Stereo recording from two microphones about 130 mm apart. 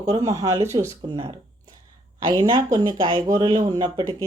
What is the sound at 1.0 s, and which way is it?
Speech, 40° right (ahead or behind).